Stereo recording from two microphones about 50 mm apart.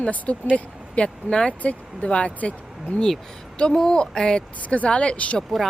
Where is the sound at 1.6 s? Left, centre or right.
Left.